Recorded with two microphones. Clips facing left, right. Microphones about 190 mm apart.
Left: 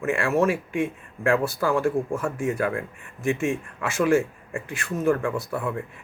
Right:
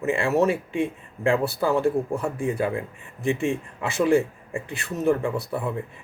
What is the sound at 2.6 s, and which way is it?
Speech, 15° right (ahead or behind).